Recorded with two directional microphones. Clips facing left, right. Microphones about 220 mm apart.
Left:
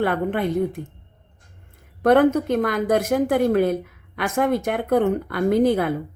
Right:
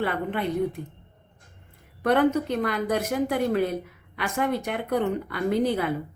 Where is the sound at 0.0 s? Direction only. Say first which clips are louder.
Left 5 dB; 50° left (ahead or behind).